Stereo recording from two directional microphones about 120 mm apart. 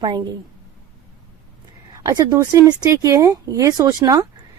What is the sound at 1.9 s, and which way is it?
A woman's voice, 30° right (ahead or behind).